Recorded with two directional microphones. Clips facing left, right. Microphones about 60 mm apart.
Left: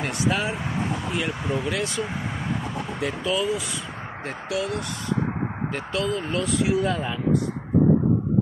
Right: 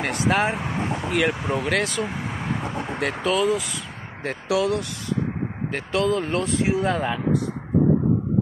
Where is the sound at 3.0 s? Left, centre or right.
Right.